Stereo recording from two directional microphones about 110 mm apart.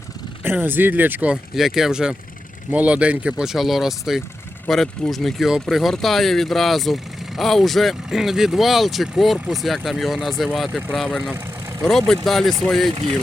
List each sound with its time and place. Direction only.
0.4 s speech: 20° right (ahead or behind)
1.5 s speech: 5° right (ahead or behind)
12.9 s speech: 50° right (ahead or behind)